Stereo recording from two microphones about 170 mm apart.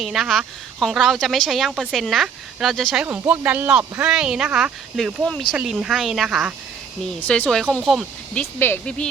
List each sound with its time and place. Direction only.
0.0 s speech: centre (ahead or behind)
7.2 s speech: 10° left (ahead or behind)